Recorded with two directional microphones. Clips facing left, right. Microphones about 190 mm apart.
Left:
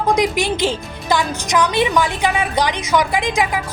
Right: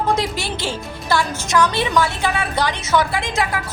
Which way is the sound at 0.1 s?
15° left (ahead or behind).